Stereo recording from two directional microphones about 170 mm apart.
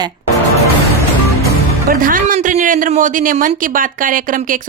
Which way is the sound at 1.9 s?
55° right (ahead or behind).